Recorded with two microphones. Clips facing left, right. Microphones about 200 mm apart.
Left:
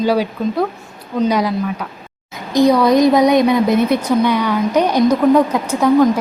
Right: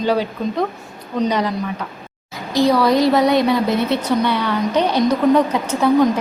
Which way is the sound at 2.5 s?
20° left (ahead or behind).